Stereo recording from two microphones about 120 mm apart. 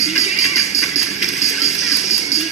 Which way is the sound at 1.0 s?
70° left (ahead or behind).